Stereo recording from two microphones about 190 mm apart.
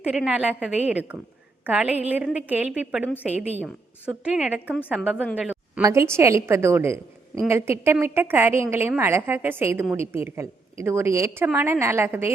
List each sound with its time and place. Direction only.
0.0 s a woman's voice: 5° right (ahead or behind)
5.3 s a sound: 5° right (ahead or behind)
5.8 s a woman's voice: 15° right (ahead or behind)